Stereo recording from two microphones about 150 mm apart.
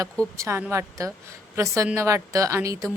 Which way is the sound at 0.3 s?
20° right (ahead or behind).